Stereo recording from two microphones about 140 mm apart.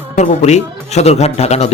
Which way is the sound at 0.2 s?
55° left (ahead or behind).